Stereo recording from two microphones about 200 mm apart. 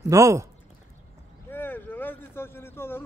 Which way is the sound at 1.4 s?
10° left (ahead or behind).